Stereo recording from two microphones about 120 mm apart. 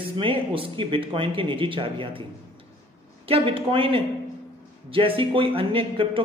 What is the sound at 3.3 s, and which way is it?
A man's voice, 50° right (ahead or behind).